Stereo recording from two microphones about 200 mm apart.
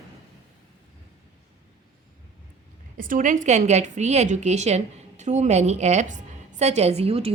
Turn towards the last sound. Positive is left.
turn(degrees=-30)  # may be behind; listen again after turning